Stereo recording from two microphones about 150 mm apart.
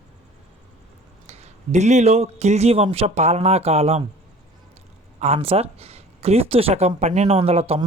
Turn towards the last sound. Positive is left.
turn(degrees=-40)  # may be behind; listen again after turning